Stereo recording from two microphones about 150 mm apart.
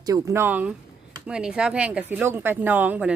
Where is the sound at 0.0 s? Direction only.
25° right (ahead or behind).